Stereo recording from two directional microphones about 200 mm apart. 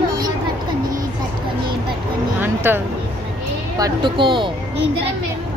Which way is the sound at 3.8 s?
20° right (ahead or behind).